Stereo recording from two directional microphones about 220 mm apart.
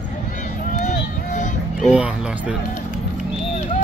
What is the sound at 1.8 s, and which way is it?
Music, 5° right (ahead or behind).